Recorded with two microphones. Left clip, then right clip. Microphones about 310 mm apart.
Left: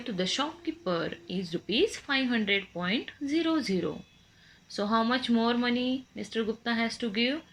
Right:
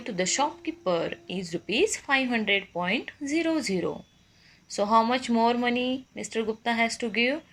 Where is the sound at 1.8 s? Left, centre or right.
Right.